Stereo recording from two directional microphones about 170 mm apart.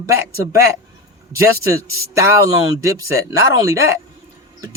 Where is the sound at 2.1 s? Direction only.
20° right (ahead or behind).